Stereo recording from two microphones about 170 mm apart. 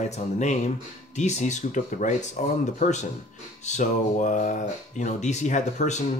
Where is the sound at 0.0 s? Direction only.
45° left (ahead or behind).